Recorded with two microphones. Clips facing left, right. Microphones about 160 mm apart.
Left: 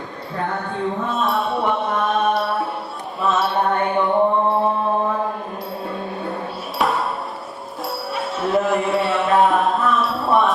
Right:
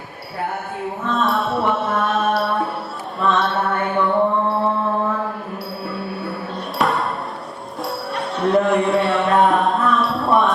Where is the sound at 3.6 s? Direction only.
20° left (ahead or behind).